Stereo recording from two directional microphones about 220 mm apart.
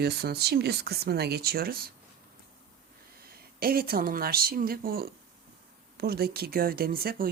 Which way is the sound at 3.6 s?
40° right (ahead or behind).